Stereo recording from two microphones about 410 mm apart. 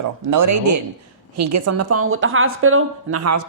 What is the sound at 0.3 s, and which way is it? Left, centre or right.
A woman's voice, right.